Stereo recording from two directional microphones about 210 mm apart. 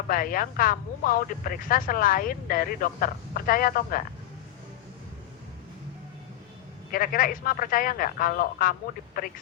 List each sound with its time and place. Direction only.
0.1 s speech: 40° left (ahead or behind)
6.9 s speech: 40° left (ahead or behind)